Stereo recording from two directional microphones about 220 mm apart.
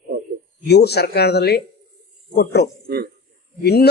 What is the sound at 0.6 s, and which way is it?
Speech, 50° left (ahead or behind).